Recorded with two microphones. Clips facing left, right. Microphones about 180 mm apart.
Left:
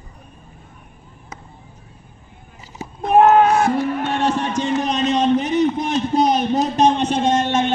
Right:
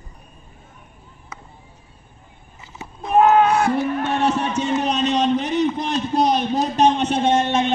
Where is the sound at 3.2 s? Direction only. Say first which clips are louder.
Left 1 dB; 40° left (ahead or behind).